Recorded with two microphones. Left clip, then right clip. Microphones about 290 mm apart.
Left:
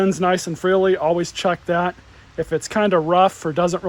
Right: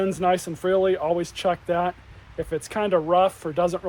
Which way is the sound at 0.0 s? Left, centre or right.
Left.